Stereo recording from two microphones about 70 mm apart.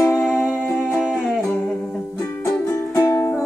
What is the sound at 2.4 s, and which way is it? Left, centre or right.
Music, left.